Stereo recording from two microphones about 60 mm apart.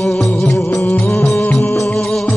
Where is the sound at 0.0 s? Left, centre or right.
Centre.